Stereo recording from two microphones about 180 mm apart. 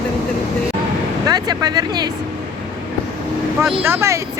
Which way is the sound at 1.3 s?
20° right (ahead or behind).